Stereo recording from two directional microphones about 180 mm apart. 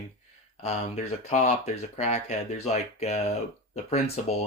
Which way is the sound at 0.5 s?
40° left (ahead or behind).